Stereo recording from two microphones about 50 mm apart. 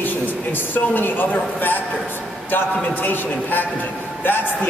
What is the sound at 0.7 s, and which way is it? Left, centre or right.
A man's voice, left.